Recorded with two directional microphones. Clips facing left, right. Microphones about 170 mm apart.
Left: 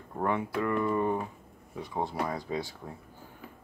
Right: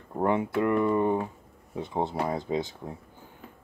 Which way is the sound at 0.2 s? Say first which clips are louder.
Right 4 dB; 25° right (ahead or behind).